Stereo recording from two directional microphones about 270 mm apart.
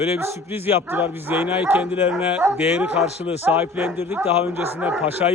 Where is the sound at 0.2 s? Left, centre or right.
Centre.